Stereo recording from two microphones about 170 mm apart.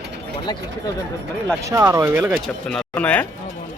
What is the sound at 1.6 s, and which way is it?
Speech, 15° right (ahead or behind).